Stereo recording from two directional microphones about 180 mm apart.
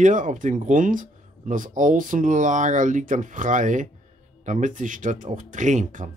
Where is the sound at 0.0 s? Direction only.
45° right (ahead or behind).